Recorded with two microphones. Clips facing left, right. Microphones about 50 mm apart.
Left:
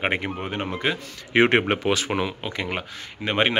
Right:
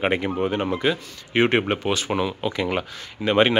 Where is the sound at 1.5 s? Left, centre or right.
Left.